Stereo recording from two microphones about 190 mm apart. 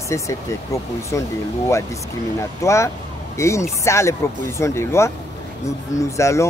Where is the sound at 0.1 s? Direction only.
15° left (ahead or behind).